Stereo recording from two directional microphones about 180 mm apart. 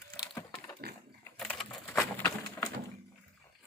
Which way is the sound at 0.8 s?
60° right (ahead or behind).